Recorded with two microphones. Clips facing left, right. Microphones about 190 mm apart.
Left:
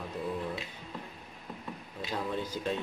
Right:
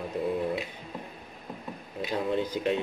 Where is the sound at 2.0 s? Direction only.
20° right (ahead or behind).